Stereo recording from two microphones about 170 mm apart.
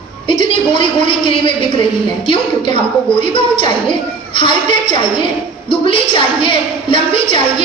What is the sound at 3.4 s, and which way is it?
A woman's voice, 30° left (ahead or behind).